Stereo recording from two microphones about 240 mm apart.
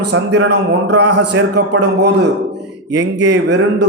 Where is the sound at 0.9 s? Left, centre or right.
Right.